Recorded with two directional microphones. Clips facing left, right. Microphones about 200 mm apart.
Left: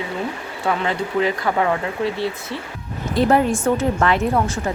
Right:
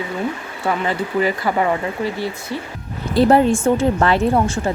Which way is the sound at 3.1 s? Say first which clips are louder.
Right 3 dB; 30° right (ahead or behind).